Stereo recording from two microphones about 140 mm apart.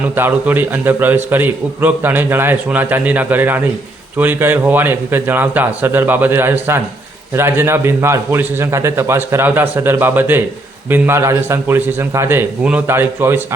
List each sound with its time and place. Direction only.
0.2 s a man's voice: 15° right (ahead or behind)